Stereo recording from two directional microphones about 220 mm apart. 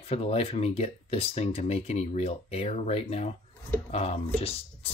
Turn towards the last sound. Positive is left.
turn(degrees=25)  # may be behind; listen again after turning